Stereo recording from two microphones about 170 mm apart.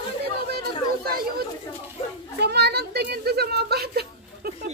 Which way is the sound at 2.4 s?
75° right (ahead or behind).